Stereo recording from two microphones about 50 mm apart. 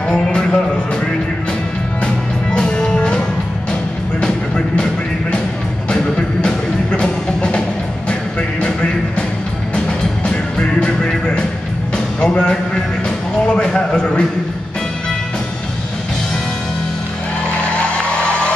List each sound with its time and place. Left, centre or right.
0.1 s music: centre
2.0 s music: centre
5.9 s music: centre
13.6 s a sound: centre